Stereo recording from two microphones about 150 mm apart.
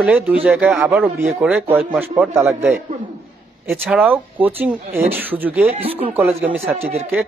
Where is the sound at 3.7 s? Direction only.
5° right (ahead or behind).